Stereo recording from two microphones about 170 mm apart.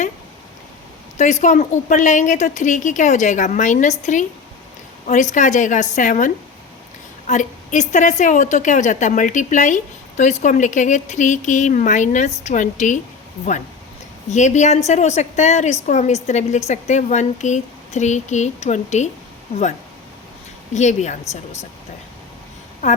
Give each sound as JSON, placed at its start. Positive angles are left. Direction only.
{"t": 1.2, "sound": "a woman's voice", "side_deg": 45}
{"t": 14.3, "sound": "a woman's voice", "side_deg": 45}
{"t": 20.7, "sound": "a woman's voice", "side_deg": 45}